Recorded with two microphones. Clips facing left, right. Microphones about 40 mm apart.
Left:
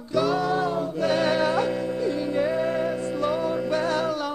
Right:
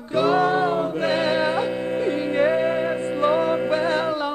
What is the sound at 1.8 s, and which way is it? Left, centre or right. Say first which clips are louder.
Music: right 3 dB; right.